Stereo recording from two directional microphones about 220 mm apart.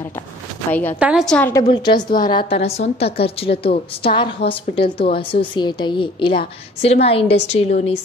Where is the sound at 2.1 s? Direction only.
40° left (ahead or behind).